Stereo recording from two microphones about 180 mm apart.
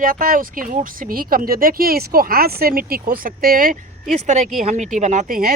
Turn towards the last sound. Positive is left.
turn(degrees=-50)  # may be behind; listen again after turning